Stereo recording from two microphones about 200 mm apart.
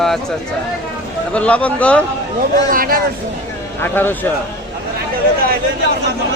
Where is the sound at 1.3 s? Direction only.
5° left (ahead or behind).